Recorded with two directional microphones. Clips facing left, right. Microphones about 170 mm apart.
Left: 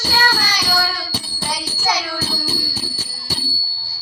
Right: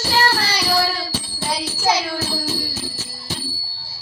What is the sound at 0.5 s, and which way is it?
Music, 30° right (ahead or behind).